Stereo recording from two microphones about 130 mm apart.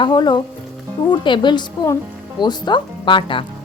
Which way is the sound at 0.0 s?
35° left (ahead or behind).